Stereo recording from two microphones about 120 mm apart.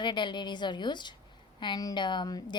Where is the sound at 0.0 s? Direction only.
40° left (ahead or behind).